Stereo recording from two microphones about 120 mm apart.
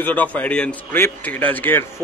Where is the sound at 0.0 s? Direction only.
10° left (ahead or behind).